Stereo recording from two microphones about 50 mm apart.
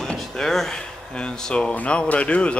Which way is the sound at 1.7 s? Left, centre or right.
Left.